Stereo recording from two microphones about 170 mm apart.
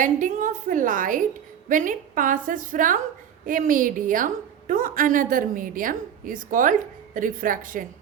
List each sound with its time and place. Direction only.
0.0 s a woman's voice: 50° right (ahead or behind)